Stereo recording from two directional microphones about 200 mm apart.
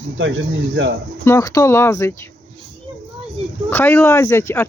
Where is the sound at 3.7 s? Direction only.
10° left (ahead or behind).